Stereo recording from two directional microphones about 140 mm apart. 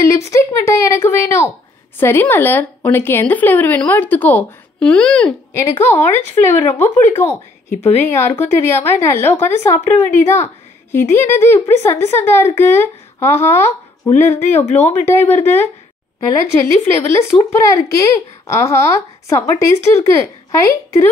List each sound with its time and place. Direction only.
0.0 s a woman's voice: 20° left (ahead or behind)